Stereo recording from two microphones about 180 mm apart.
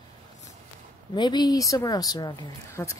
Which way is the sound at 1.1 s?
25° left (ahead or behind).